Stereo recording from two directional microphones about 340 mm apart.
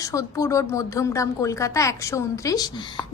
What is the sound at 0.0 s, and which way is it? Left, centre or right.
A woman's voice, centre.